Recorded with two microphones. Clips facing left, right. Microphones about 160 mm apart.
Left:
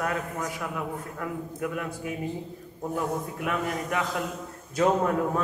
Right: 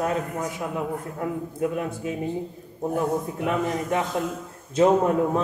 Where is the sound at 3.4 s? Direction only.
25° right (ahead or behind).